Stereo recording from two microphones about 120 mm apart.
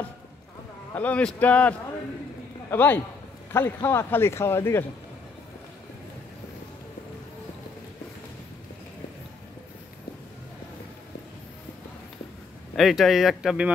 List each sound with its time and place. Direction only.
0.9 s speech: 10° left (ahead or behind)
12.7 s speech: centre (ahead or behind)